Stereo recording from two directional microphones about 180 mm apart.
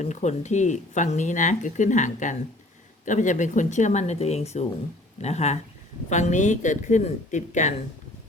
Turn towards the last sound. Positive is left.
turn(degrees=40)  # may be behind; listen again after turning